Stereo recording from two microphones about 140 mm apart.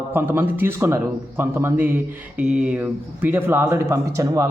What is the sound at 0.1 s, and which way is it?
A man's voice, 15° right (ahead or behind).